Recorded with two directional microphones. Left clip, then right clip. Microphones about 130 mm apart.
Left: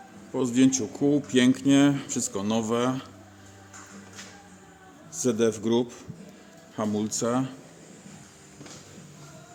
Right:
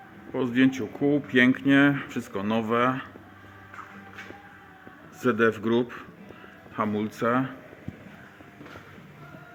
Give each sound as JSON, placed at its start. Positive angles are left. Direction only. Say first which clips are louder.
{"t": 0.3, "sound": "speech", "louder": "left 1 dB", "side_deg": 35}
{"t": 5.2, "sound": "speech", "louder": "right 2 dB", "side_deg": 20}